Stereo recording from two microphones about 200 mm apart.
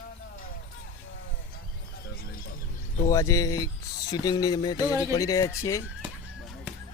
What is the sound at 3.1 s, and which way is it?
Speech, 15° left (ahead or behind).